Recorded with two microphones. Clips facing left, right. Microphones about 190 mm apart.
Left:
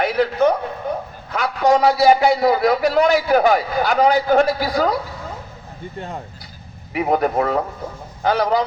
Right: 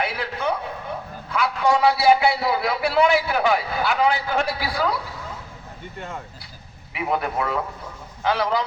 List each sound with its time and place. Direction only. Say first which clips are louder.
0.0 s a sound: left 9 dB; 40° left (ahead or behind)
1.3 s a man's voice: left 4 dB; 40° left (ahead or behind)
6.0 s a man's voice: left 3 dB; 35° left (ahead or behind)